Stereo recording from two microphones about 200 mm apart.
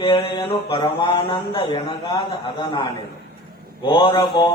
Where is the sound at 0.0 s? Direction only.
25° left (ahead or behind).